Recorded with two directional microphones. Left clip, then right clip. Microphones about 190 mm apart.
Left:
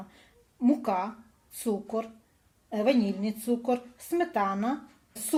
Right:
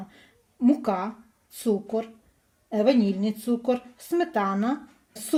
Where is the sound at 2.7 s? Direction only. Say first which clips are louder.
Right 4 dB; 45° right (ahead or behind).